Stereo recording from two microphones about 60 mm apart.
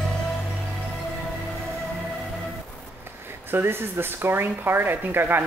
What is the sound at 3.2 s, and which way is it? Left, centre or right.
Speech, right.